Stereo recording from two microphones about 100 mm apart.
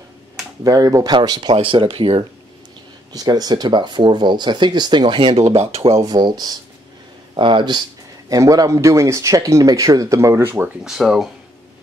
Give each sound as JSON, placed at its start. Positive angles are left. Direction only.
{"t": 0.7, "sound": "speech", "side_deg": -35}
{"t": 1.5, "sound": "speech", "side_deg": -65}
{"t": 3.1, "sound": "speech", "side_deg": -40}
{"t": 5.9, "sound": "speech", "side_deg": -45}
{"t": 8.3, "sound": "speech", "side_deg": -35}
{"t": 10.8, "sound": "speech", "side_deg": -5}